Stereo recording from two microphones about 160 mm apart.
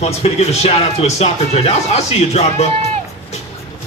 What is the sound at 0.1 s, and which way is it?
A man's voice, 40° left (ahead or behind).